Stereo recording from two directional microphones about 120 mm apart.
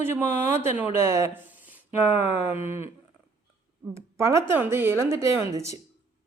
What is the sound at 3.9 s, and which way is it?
Speech, 25° right (ahead or behind).